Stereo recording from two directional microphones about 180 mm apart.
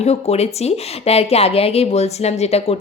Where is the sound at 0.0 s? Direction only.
35° left (ahead or behind).